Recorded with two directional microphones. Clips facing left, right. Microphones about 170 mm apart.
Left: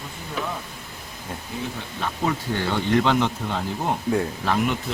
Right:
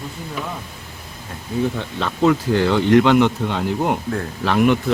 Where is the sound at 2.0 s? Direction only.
90° right.